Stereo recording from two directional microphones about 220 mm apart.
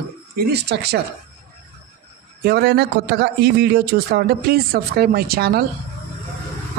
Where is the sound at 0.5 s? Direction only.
50° right (ahead or behind).